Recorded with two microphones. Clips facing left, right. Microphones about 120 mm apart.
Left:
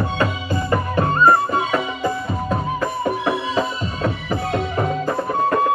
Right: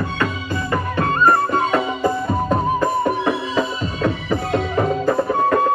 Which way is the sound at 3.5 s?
35° left (ahead or behind).